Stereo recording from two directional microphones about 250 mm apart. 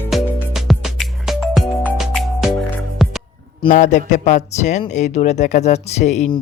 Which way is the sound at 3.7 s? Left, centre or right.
Left.